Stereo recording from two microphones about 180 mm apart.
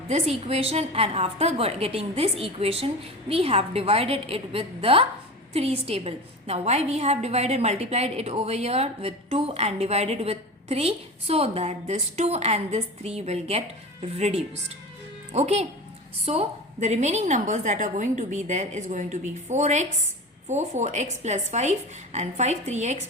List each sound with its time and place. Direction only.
0.1 s a woman's voice: 35° right (ahead or behind)